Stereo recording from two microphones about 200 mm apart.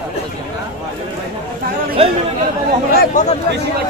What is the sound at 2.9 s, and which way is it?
Speech, 40° left (ahead or behind).